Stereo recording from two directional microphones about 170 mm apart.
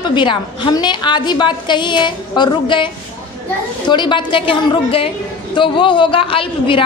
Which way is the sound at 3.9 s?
25° left (ahead or behind).